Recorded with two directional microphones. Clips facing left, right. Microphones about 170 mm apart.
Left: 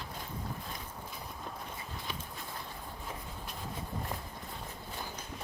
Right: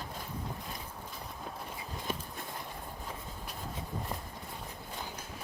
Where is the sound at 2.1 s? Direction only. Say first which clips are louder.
Right 7 dB; 45° right (ahead or behind).